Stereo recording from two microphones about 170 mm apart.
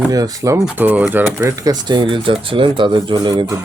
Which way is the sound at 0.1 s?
20° right (ahead or behind).